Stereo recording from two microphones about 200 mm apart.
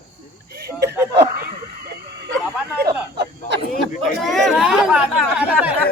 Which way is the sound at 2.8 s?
55° right (ahead or behind).